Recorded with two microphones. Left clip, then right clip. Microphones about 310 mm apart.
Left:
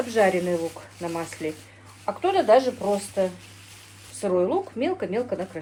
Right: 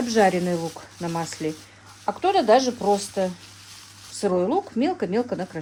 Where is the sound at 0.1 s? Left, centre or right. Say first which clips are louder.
Right 2 dB; right.